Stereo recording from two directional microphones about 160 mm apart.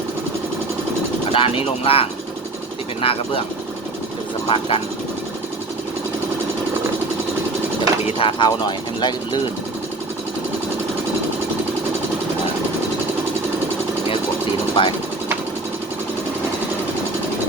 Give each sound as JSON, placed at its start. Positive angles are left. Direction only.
{"t": 1.3, "sound": "speech", "side_deg": 35}
{"t": 4.4, "sound": "speech", "side_deg": 35}
{"t": 8.0, "sound": "speech", "side_deg": 35}
{"t": 14.8, "sound": "speech", "side_deg": 30}